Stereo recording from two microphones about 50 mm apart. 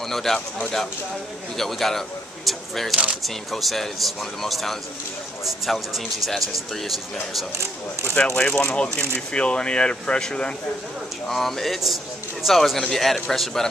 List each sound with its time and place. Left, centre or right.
0.1 s speech: centre
8.2 s speech: left
8.6 s speech: centre
11.2 s speech: centre